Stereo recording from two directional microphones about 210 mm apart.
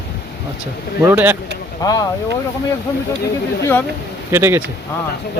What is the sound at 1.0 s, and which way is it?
Speech, 10° right (ahead or behind).